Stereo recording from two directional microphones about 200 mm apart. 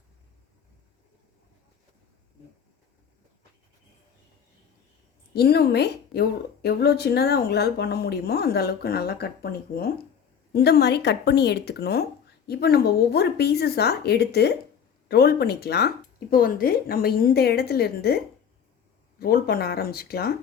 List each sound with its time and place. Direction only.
5.3 s speech: 50° left (ahead or behind)
19.2 s speech: 50° left (ahead or behind)